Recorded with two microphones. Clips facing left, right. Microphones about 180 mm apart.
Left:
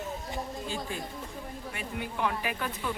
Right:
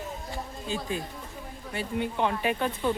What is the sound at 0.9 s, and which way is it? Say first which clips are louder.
Speech: right 3 dB; 20° right (ahead or behind).